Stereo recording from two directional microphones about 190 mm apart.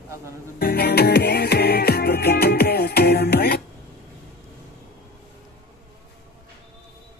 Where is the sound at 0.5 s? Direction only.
55° left (ahead or behind).